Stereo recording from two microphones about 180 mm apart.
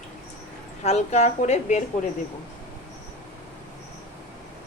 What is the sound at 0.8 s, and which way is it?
Speech, 35° left (ahead or behind).